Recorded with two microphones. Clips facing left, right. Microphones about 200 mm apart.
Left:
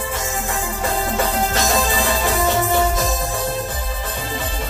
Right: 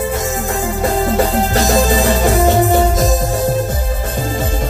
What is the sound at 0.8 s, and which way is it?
Music, 40° right (ahead or behind).